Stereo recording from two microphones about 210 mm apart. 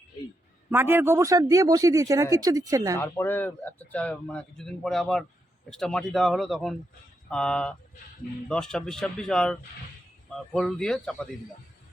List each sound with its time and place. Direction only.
0.7 s a man's voice: 10° right (ahead or behind)
3.0 s speech: 10° left (ahead or behind)